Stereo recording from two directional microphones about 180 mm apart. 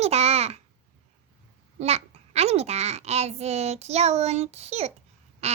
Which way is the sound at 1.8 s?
35° right (ahead or behind).